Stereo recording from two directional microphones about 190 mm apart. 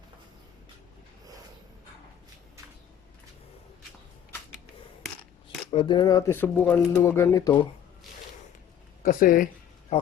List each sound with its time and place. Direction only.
5.7 s speech: 25° left (ahead or behind)
9.0 s speech: 45° left (ahead or behind)